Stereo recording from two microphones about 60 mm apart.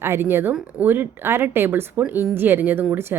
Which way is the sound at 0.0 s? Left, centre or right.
Right.